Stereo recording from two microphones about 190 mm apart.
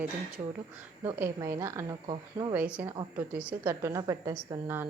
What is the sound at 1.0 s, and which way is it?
A woman's voice, 15° right (ahead or behind).